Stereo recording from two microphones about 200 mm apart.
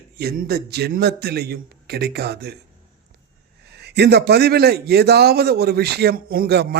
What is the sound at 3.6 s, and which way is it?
A man's voice, 55° right (ahead or behind).